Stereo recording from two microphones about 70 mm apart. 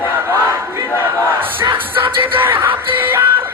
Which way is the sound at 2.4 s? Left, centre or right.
Right.